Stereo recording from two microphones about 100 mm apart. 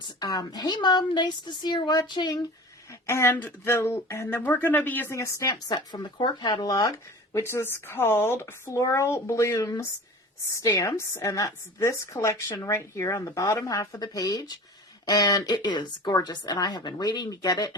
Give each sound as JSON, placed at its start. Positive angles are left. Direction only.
{"t": 0.2, "sound": "a woman's voice", "side_deg": 40}
{"t": 2.9, "sound": "speech", "side_deg": 30}
{"t": 5.1, "sound": "a woman's voice", "side_deg": 30}
{"t": 5.6, "sound": "a woman's voice", "side_deg": 45}